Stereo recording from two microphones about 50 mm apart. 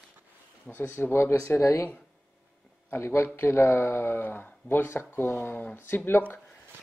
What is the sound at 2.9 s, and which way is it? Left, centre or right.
Speech, left.